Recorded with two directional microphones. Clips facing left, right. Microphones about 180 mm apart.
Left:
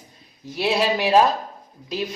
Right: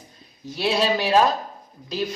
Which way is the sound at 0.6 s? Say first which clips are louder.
Left 1 dB; 10° left (ahead or behind).